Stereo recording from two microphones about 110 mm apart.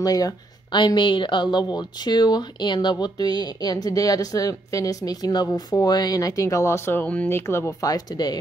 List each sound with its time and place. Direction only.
0.0 s speech: 35° left (ahead or behind)